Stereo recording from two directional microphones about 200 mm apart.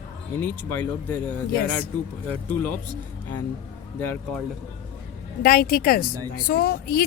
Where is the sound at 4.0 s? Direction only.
10° left (ahead or behind).